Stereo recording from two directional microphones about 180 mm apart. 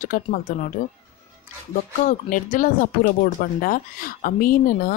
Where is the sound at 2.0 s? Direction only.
45° left (ahead or behind).